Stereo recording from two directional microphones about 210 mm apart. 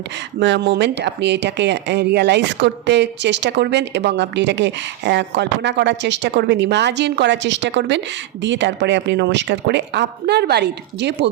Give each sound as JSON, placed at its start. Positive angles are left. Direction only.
{"t": 0.3, "sound": "speech", "side_deg": -60}